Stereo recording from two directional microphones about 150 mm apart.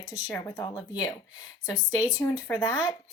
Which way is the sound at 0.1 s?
25° left (ahead or behind).